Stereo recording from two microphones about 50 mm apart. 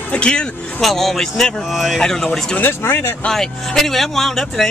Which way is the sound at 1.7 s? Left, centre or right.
Centre.